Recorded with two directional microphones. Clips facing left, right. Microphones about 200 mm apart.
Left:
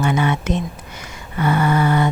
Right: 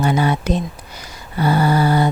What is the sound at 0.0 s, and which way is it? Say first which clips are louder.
Speech: right 1 dB; 35° right (ahead or behind).